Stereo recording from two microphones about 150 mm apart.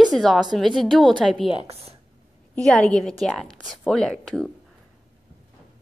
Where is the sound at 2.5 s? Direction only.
5° left (ahead or behind).